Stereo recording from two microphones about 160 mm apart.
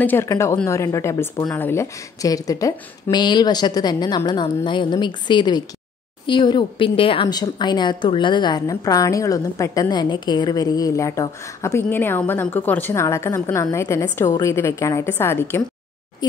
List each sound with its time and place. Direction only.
0.0 s a woman's voice: 10° left (ahead or behind)